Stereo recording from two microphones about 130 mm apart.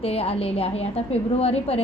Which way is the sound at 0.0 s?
50° left (ahead or behind).